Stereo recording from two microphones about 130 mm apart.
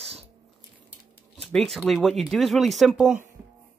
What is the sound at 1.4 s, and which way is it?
Speech, 5° left (ahead or behind).